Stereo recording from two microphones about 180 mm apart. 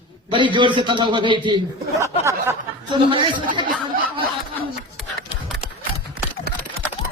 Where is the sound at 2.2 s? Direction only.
15° right (ahead or behind).